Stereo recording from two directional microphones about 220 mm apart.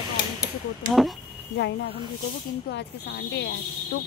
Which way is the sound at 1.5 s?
50° left (ahead or behind).